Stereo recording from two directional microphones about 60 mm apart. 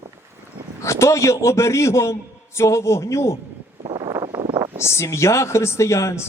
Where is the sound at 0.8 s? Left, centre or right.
Left.